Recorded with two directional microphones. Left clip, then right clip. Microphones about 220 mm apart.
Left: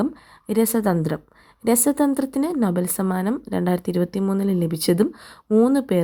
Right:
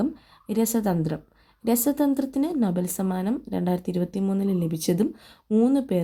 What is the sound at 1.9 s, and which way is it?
Speech, 35° left (ahead or behind).